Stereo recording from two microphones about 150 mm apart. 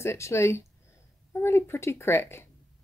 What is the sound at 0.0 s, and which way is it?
Speech, 20° left (ahead or behind).